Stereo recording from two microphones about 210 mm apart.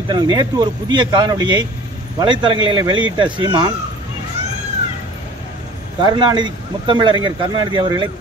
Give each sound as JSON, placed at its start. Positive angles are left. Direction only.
{"t": 0.1, "sound": "speech", "side_deg": -20}
{"t": 6.0, "sound": "speech", "side_deg": -20}